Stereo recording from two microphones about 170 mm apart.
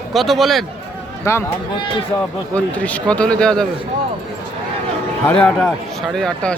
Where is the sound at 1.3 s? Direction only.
15° left (ahead or behind).